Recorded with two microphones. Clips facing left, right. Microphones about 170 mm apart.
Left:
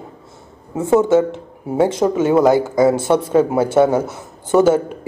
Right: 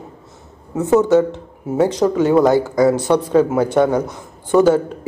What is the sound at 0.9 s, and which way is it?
A man's voice, 20° left (ahead or behind).